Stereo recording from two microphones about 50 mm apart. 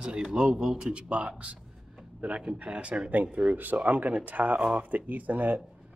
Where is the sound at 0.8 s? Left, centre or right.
Right.